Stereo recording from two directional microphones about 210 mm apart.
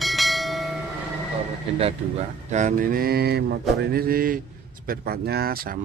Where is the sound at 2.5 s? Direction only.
40° right (ahead or behind).